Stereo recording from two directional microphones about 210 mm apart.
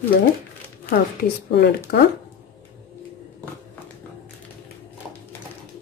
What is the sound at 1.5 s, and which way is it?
Speech, 50° left (ahead or behind).